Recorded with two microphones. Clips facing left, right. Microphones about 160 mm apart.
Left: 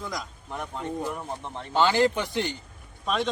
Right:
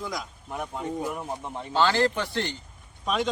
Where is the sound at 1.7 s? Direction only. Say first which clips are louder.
Left 1 dB; 15° left (ahead or behind).